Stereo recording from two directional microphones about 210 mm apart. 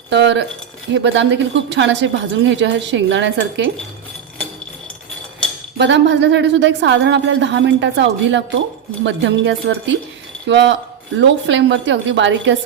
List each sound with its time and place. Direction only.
0.1 s a sound: 55° right (ahead or behind)
0.9 s a woman's voice: 60° right (ahead or behind)
5.7 s a woman's voice: 55° right (ahead or behind)